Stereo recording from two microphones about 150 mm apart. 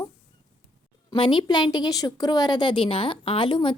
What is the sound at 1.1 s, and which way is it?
A woman's voice, 30° left (ahead or behind).